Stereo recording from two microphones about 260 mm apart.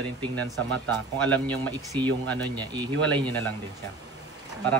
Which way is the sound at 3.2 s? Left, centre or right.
Centre.